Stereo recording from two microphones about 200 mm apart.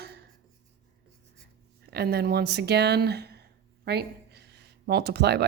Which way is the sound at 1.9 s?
50° right (ahead or behind).